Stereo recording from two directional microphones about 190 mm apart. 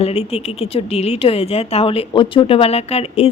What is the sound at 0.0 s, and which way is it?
A woman's voice, 30° left (ahead or behind).